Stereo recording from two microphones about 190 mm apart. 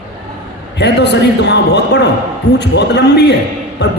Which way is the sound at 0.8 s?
60° left (ahead or behind).